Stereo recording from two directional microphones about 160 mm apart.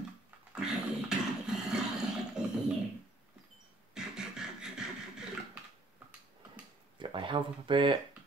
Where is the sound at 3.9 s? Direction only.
5° right (ahead or behind).